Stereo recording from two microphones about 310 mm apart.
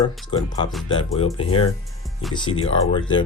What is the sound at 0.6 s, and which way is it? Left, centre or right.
Speech, centre.